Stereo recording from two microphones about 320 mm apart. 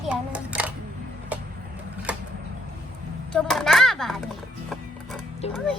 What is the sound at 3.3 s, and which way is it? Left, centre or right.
Speech, centre.